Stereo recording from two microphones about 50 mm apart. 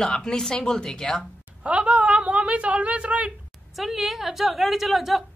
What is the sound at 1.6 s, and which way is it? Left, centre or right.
A woman's voice, right.